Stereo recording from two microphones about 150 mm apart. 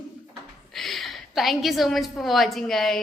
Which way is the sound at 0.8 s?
Centre (ahead or behind).